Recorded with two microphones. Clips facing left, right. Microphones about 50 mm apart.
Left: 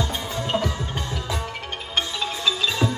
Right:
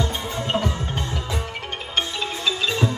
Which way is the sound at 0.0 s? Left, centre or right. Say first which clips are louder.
Right 1 dB; right.